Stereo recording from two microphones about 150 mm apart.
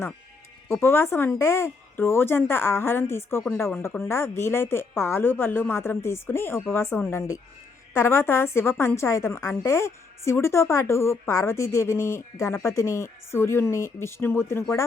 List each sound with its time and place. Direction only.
0.7 s a woman's voice: 15° left (ahead or behind)